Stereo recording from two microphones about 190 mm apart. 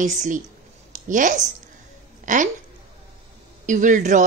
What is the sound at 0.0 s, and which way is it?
A woman's voice, 40° right (ahead or behind).